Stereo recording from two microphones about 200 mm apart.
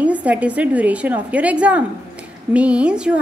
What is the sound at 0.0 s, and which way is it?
A woman's voice, 5° right (ahead or behind).